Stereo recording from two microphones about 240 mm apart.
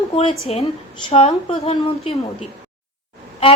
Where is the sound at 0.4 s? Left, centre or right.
Left.